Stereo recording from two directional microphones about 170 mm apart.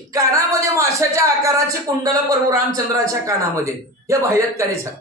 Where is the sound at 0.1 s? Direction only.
20° right (ahead or behind).